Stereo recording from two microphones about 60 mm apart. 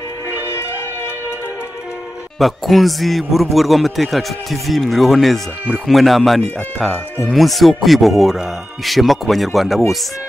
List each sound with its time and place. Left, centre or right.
0.3 s music: right
2.3 s speech: centre